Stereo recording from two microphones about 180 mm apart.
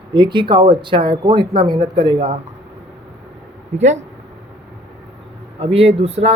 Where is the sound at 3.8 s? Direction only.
40° right (ahead or behind).